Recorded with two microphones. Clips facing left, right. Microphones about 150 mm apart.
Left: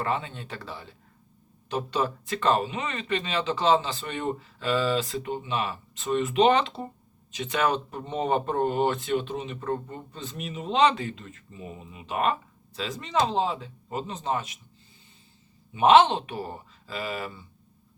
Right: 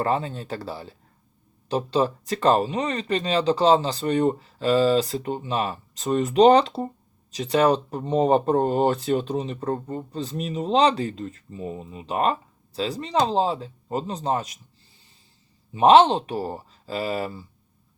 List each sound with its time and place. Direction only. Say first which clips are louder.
0.0 s speech: right 5 dB; 35° right (ahead or behind)
15.7 s speech: right 3 dB; 35° right (ahead or behind)